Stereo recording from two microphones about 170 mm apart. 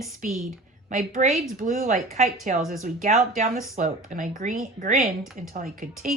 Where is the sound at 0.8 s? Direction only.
45° right (ahead or behind).